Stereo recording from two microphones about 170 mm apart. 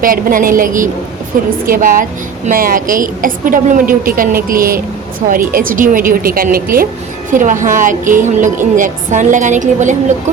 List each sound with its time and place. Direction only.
0.0 s a woman's voice: 55° right (ahead or behind)